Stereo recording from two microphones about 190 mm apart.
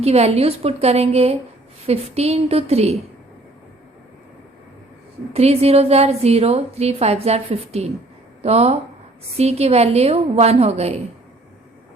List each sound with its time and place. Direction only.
0.0 s a woman's voice: 35° right (ahead or behind)
5.3 s a woman's voice: 35° right (ahead or behind)